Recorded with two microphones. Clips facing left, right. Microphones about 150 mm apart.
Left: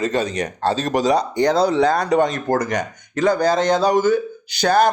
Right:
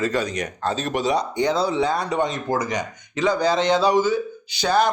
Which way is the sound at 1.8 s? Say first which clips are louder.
Left 5 dB; 40° left (ahead or behind).